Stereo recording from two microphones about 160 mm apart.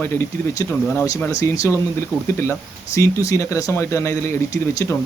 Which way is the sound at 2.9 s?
20° left (ahead or behind).